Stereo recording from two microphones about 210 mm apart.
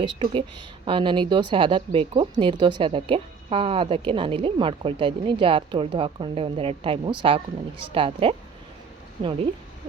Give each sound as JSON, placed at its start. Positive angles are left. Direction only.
{"t": 0.0, "sound": "speech", "side_deg": -25}